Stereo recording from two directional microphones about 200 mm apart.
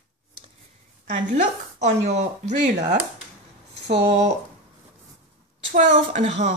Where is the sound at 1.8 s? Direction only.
35° right (ahead or behind).